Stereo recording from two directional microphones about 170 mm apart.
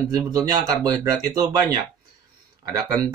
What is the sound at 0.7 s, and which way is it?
Speech, 20° right (ahead or behind).